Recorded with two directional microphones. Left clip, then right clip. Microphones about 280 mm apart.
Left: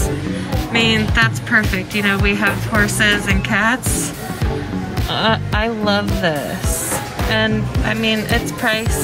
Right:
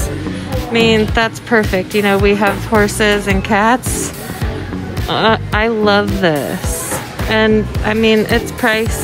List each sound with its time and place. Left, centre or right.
0.7 s speech: centre
5.1 s speech: right
7.3 s speech: right